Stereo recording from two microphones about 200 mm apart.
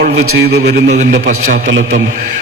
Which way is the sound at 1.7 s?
65° right (ahead or behind).